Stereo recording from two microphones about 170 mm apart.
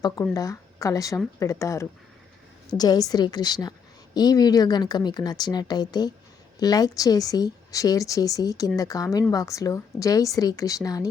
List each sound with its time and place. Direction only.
0.0 s a woman's voice: 20° left (ahead or behind)